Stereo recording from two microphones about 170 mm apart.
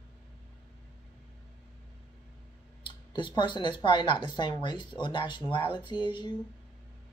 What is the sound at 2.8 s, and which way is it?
Speech, 25° left (ahead or behind).